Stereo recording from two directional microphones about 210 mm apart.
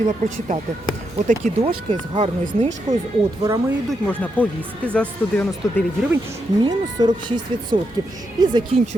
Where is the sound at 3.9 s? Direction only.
5° left (ahead or behind).